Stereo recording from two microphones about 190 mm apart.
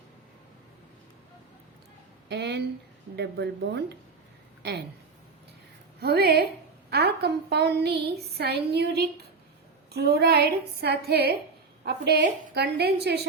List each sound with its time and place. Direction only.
2.3 s a woman's voice: 60° right (ahead or behind)
6.0 s a woman's voice: 55° right (ahead or behind)